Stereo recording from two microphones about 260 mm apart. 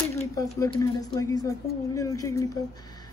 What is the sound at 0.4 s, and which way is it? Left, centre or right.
Speech, centre.